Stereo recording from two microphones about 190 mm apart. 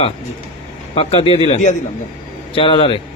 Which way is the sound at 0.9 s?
30° left (ahead or behind).